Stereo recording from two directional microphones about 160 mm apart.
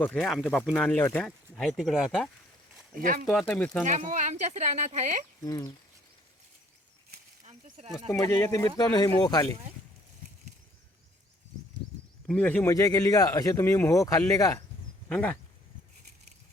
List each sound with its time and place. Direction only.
0.0 s speech: 5° left (ahead or behind)
2.9 s speech: 60° right (ahead or behind)
3.2 s speech: 5° left (ahead or behind)
3.8 s speech: 50° right (ahead or behind)
5.5 s speech: 25° left (ahead or behind)
8.6 s speech: 25° left (ahead or behind)
12.3 s speech: 10° left (ahead or behind)